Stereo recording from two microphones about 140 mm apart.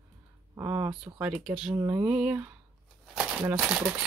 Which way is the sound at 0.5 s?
20° right (ahead or behind).